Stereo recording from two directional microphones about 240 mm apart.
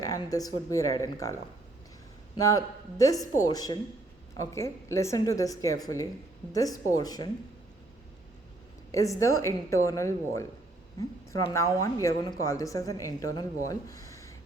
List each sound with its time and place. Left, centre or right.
0.0 s a woman's voice: centre
8.9 s a woman's voice: centre